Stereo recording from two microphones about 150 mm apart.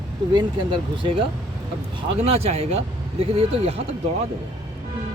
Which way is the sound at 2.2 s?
45° right (ahead or behind).